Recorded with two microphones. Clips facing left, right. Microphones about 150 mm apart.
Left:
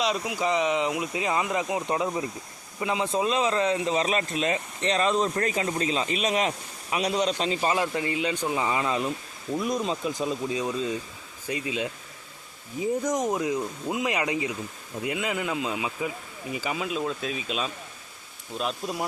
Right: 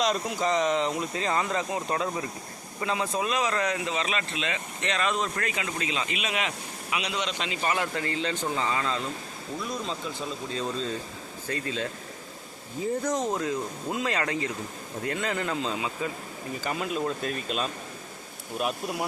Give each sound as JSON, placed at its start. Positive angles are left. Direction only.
{"t": 0.0, "sound": "speech", "side_deg": 5}
{"t": 7.7, "sound": "speech", "side_deg": 20}